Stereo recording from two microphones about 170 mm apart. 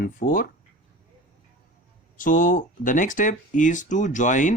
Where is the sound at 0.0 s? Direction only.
55° left (ahead or behind).